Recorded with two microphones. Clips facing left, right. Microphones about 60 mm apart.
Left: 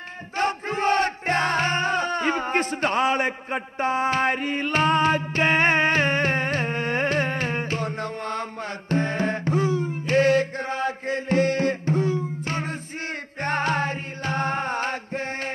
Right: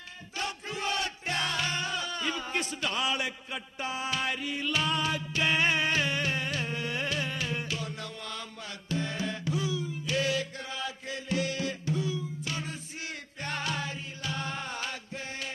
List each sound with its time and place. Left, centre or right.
0.4 s battle cry: left
13.4 s music: left